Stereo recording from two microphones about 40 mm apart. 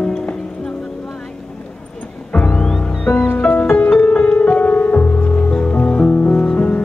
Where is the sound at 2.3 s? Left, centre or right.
Left.